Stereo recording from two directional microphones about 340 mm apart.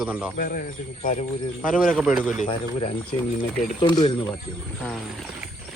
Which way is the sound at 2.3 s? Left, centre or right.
Left.